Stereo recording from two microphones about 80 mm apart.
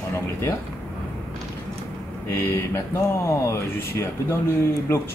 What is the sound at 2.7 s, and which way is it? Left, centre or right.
Speech, left.